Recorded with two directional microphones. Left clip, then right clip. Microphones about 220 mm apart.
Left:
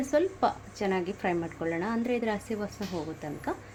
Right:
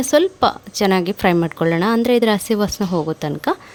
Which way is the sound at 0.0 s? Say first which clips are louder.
Right 11 dB; 40° right (ahead or behind).